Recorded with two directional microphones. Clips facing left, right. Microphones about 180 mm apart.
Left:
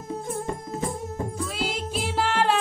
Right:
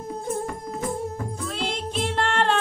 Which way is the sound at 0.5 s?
25° left (ahead or behind).